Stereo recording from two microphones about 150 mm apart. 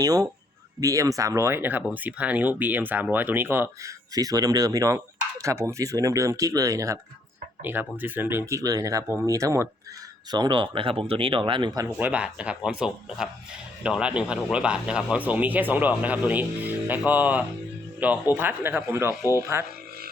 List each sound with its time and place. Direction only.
0.0 s speech: 25° right (ahead or behind)
11.9 s speech: 10° right (ahead or behind)